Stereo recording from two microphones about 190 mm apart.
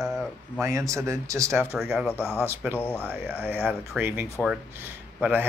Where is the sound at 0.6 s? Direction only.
15° right (ahead or behind).